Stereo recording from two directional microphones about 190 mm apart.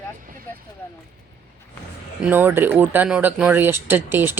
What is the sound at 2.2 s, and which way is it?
Speech, 10° right (ahead or behind).